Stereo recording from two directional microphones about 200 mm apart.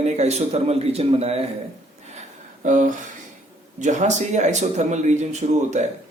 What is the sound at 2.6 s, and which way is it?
Speech, 40° right (ahead or behind).